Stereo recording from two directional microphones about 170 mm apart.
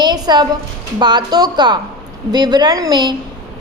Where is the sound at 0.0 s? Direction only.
25° right (ahead or behind).